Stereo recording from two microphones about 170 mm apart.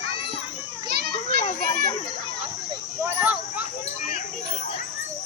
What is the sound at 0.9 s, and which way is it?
Children playing, 65° right (ahead or behind).